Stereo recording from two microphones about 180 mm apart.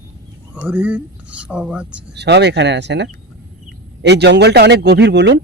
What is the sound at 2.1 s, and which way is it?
Speech, 70° right (ahead or behind).